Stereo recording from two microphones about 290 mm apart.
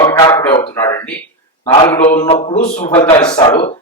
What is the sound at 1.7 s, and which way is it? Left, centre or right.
A man's voice, centre.